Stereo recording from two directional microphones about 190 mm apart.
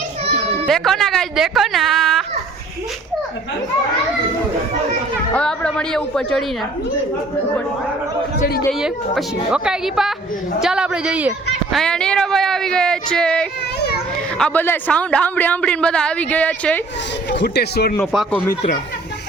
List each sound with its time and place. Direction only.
0.6 s speech: centre (ahead or behind)
5.3 s speech: 5° left (ahead or behind)
8.8 s speech: 5° right (ahead or behind)
11.8 s speech: 5° left (ahead or behind)
17.2 s speech: 65° left (ahead or behind)
18.0 s speech: centre (ahead or behind)